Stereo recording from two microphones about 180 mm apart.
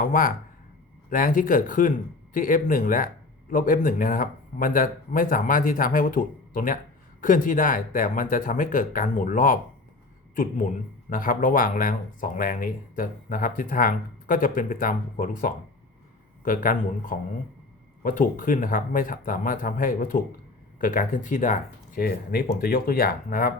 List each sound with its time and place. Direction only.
0.0 s speech: 50° left (ahead or behind)